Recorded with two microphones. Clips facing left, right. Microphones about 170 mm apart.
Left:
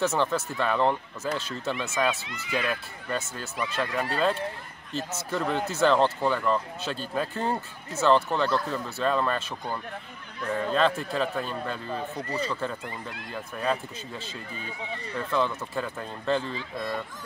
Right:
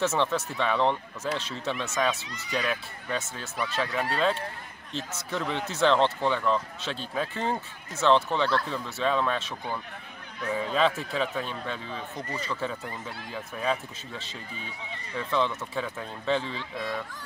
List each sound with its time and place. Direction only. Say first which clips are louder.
0.0 s speech: left 1 dB; centre (ahead or behind)
12.2 s speech: left 2 dB; 35° left (ahead or behind)
12.5 s speech: even; centre (ahead or behind)